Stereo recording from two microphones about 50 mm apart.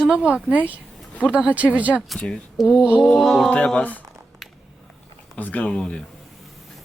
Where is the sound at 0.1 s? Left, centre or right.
Right.